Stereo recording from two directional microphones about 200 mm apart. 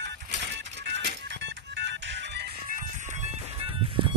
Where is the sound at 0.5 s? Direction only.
60° right (ahead or behind).